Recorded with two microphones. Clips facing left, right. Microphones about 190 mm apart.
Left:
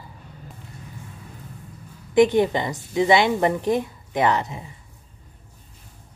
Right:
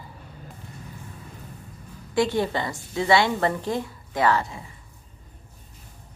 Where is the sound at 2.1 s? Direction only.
20° left (ahead or behind).